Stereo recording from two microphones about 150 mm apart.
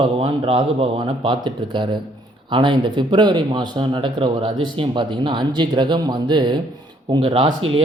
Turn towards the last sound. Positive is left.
turn(degrees=-35)  # may be behind; listen again after turning